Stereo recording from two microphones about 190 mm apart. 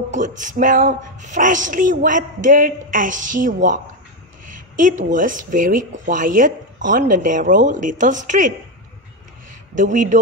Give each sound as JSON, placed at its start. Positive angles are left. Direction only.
{"t": 0.4, "sound": "speech", "side_deg": -45}
{"t": 9.8, "sound": "speech", "side_deg": -40}